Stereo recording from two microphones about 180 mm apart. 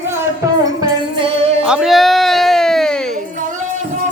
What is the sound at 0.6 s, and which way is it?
Music, 25° right (ahead or behind).